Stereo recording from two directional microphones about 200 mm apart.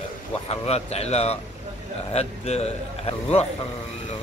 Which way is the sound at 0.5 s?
30° left (ahead or behind).